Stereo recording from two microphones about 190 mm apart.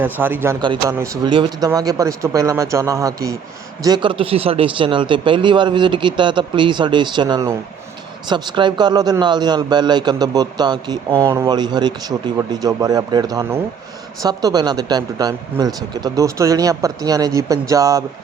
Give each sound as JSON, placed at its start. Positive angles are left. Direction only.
{"t": 0.0, "sound": "speech", "side_deg": -10}
{"t": 0.6, "sound": "a man's voice", "side_deg": -25}